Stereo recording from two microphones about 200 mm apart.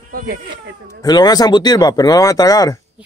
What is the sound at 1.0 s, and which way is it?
Speech, 20° left (ahead or behind).